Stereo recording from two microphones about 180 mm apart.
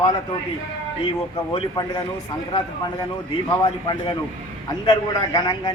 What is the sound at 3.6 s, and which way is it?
A man's voice, 25° left (ahead or behind).